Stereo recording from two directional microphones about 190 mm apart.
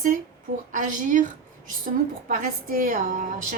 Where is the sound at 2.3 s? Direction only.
45° right (ahead or behind).